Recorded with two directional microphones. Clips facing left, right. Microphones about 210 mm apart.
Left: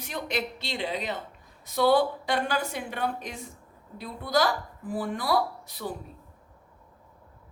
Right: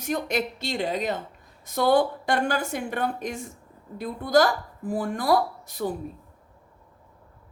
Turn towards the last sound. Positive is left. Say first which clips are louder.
# right 4 dB
turn(degrees=-45)  # may be behind; listen again after turning